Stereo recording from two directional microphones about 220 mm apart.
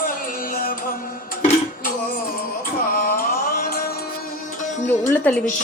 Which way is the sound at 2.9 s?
40° left (ahead or behind).